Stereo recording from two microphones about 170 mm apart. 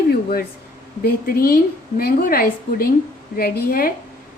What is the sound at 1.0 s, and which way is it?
A woman's voice, 60° left (ahead or behind).